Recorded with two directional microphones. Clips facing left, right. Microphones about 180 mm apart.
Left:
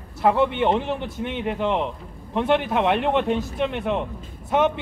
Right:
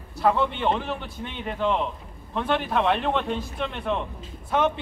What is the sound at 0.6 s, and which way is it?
A man's voice, 20° left (ahead or behind).